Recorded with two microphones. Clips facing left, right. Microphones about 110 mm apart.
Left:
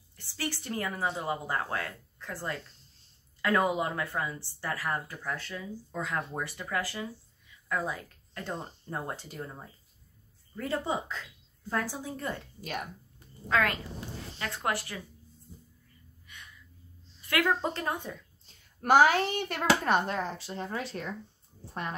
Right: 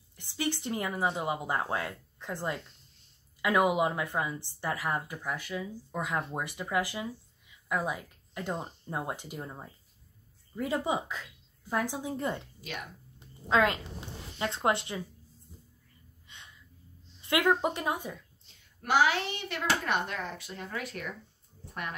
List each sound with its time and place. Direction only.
0.2 s a woman's voice: 20° right (ahead or behind)
13.2 s a sound: 20° right (ahead or behind)
14.4 s a woman's voice: 25° right (ahead or behind)
16.3 s gasp: 25° right (ahead or behind)
17.2 s speech: 20° right (ahead or behind)
18.4 s a child's voice: 45° left (ahead or behind); by 21.1 s 30° left (ahead or behind)